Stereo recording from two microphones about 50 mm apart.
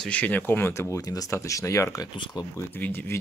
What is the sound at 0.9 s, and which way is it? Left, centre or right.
Speech, left.